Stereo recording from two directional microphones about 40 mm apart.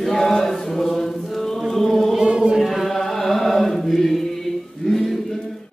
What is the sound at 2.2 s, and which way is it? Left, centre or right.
Chant, right.